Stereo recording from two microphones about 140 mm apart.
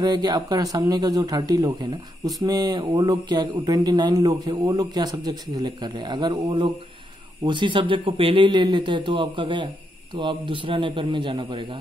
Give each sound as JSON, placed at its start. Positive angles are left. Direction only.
{"t": 0.0, "sound": "speech", "side_deg": -30}